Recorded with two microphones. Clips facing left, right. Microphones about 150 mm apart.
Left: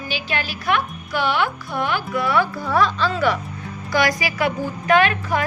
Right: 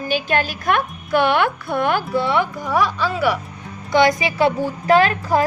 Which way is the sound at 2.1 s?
25° right (ahead or behind).